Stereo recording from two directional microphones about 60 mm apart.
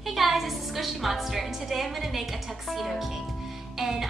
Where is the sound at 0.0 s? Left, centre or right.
Centre.